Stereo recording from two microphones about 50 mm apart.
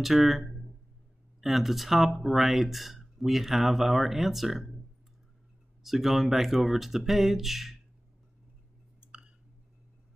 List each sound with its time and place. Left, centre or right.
0.0 s speech: centre
5.8 s speech: centre
9.0 s a sound: centre